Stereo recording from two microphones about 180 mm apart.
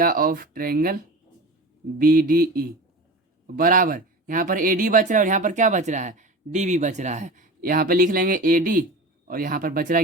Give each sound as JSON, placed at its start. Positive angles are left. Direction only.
{"t": 0.0, "sound": "speech", "side_deg": -55}
{"t": 2.0, "sound": "speech", "side_deg": -55}